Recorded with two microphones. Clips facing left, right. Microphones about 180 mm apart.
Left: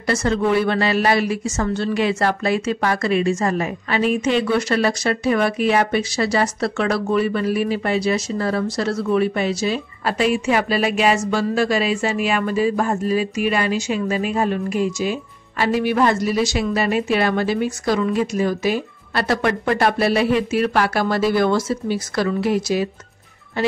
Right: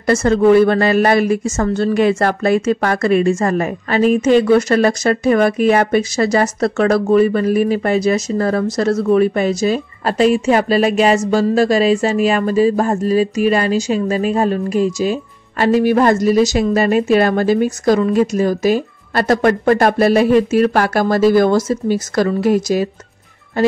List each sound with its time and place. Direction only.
0.0 s speech: 45° right (ahead or behind)